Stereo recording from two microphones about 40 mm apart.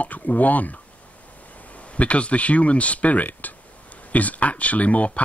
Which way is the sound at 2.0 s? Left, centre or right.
Left.